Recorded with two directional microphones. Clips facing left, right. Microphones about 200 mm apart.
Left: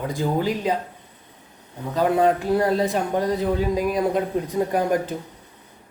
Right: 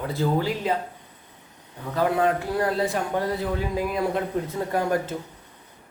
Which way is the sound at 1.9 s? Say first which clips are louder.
Left 3 dB; 20° left (ahead or behind).